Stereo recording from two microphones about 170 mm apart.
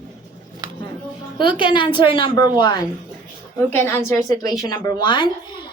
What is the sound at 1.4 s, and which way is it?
Speech, 30° left (ahead or behind).